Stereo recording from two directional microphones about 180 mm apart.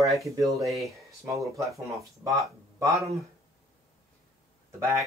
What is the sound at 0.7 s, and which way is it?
Speech, centre (ahead or behind).